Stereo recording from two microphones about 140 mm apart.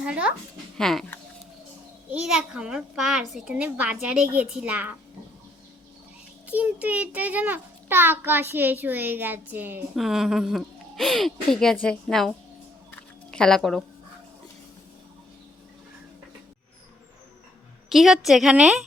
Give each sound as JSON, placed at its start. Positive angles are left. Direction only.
{"t": 0.0, "sound": "a child's voice", "side_deg": -10}
{"t": 0.8, "sound": "speech", "side_deg": 5}
{"t": 2.0, "sound": "a child's voice", "side_deg": -5}
{"t": 6.5, "sound": "a child's voice", "side_deg": -10}
{"t": 9.9, "sound": "speech", "side_deg": 0}
{"t": 12.9, "sound": "a sound", "side_deg": 10}
{"t": 17.8, "sound": "speech", "side_deg": 0}